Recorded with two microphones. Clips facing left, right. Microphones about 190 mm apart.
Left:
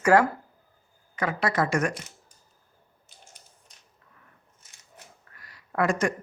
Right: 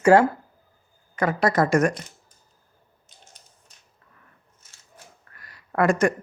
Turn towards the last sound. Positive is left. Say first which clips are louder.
# right 5 dB
turn(degrees=-50)  # may be behind; listen again after turning